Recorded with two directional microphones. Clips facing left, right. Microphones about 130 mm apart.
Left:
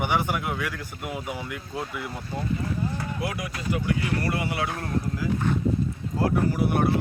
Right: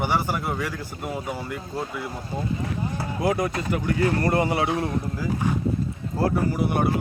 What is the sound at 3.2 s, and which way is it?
Speech, 45° right (ahead or behind).